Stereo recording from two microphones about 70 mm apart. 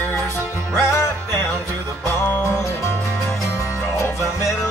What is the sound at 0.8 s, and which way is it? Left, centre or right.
Music, left.